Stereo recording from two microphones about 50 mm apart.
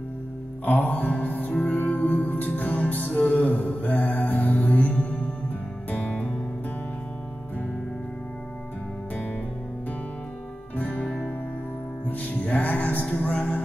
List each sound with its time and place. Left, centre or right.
0.7 s music: left
10.8 s music: left
12.1 s music: left